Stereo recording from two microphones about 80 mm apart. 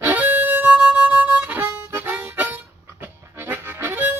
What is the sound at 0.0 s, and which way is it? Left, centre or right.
Harmonica, right.